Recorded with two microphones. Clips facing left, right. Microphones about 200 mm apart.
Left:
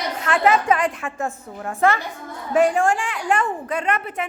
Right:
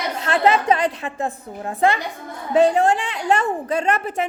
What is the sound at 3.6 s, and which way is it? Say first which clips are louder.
Speech: right 3 dB; 40° right (ahead or behind).